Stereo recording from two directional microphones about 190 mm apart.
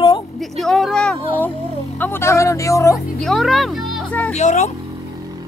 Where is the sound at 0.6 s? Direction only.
Centre (ahead or behind).